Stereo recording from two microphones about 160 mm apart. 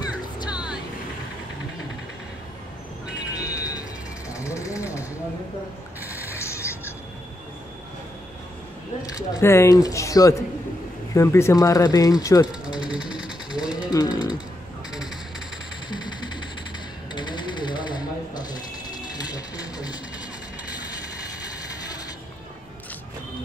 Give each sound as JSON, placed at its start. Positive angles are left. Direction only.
{"t": 3.3, "sound": "music", "side_deg": 20}
{"t": 4.3, "sound": "jackhammer", "side_deg": 20}
{"t": 6.0, "sound": "a sound", "side_deg": -10}
{"t": 6.3, "sound": "music", "side_deg": 15}
{"t": 9.0, "sound": "speech", "side_deg": 20}
{"t": 12.6, "sound": "sewing machine", "side_deg": -5}
{"t": 13.8, "sound": "speech", "side_deg": 25}
{"t": 17.1, "sound": "a sound", "side_deg": 30}